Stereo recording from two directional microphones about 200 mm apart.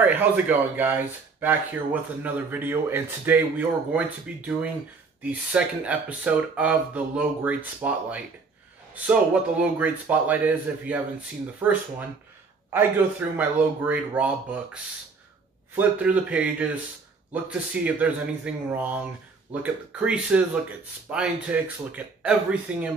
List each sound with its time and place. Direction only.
0.0 s speech: 10° right (ahead or behind)
12.7 s speech: 10° right (ahead or behind)